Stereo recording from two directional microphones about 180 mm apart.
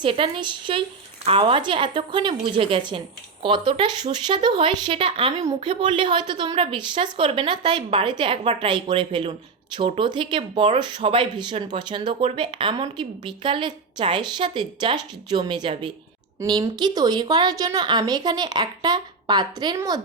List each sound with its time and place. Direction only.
0.0 s speech: 30° right (ahead or behind)